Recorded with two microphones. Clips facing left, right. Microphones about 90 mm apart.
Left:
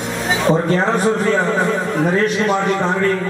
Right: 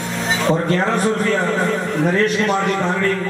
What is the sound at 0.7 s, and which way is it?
A man's voice, 20° left (ahead or behind).